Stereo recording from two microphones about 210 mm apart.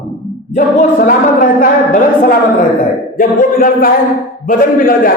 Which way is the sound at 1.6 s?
40° left (ahead or behind).